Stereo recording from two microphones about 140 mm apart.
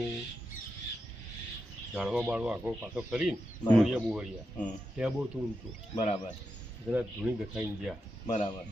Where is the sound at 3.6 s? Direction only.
Centre (ahead or behind).